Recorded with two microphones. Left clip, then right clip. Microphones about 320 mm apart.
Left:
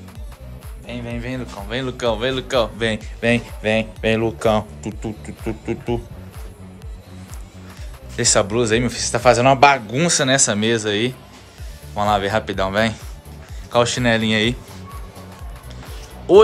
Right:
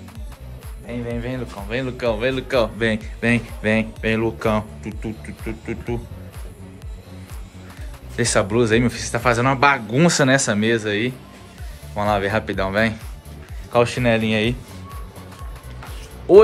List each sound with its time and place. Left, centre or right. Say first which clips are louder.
1.0 s speech: right 1 dB; centre
8.2 s speech: left 1 dB; centre
16.3 s speech: even; centre